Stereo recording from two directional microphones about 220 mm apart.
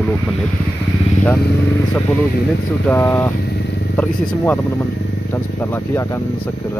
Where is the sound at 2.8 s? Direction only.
10° left (ahead or behind).